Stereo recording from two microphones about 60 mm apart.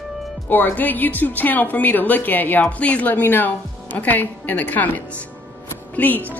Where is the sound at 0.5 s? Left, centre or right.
Left.